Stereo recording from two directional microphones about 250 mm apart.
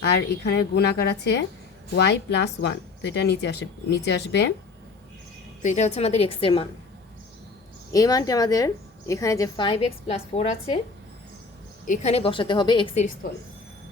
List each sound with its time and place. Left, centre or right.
0.1 s speech: left
5.6 s a woman's voice: left
7.9 s a woman's voice: centre
11.9 s a woman's voice: left